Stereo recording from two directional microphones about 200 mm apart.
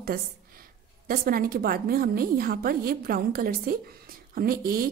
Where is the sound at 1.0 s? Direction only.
45° right (ahead or behind).